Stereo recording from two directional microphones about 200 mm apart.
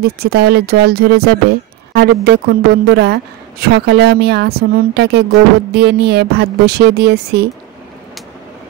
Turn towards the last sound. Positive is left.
turn(degrees=-55)  # may be behind; listen again after turning